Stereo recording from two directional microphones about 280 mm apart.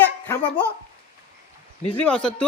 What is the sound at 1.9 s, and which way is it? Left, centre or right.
Speech, centre.